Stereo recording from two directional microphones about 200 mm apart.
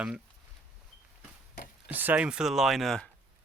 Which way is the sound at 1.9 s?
10° right (ahead or behind).